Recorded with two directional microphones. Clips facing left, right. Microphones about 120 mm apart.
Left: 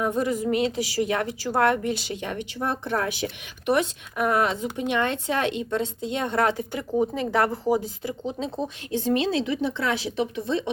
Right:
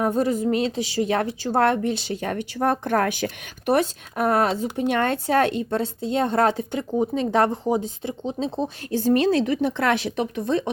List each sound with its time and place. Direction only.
0.0 s speech: 35° right (ahead or behind)
2.2 s speech: 45° right (ahead or behind)